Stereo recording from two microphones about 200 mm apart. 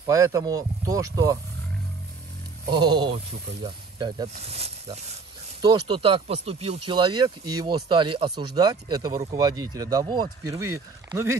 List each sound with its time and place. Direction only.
0.0 s speech: 15° right (ahead or behind)
2.7 s speech: 20° right (ahead or behind)